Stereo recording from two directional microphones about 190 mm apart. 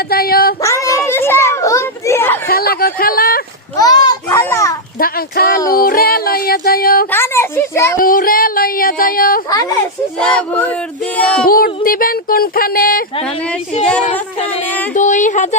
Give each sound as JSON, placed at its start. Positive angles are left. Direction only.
{"t": 0.1, "sound": "child singing", "side_deg": 55}
{"t": 0.6, "sound": "children playing", "side_deg": 15}
{"t": 2.5, "sound": "a sound", "side_deg": 50}
{"t": 3.8, "sound": "children playing", "side_deg": 20}
{"t": 4.9, "sound": "speech", "side_deg": 50}
{"t": 7.1, "sound": "a woman's voice", "side_deg": 10}
{"t": 7.9, "sound": "dog", "side_deg": 50}
{"t": 9.5, "sound": "speech", "side_deg": 20}
{"t": 10.2, "sound": "a sound", "side_deg": 5}
{"t": 11.4, "sound": "speech", "side_deg": 50}
{"t": 13.2, "sound": "speech", "side_deg": 5}
{"t": 14.0, "sound": "speech", "side_deg": 35}